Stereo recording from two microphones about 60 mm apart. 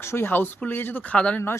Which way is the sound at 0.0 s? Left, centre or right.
Left.